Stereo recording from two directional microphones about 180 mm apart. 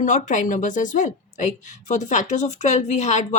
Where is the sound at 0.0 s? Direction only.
45° left (ahead or behind).